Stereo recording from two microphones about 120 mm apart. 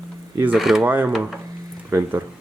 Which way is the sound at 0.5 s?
5° right (ahead or behind).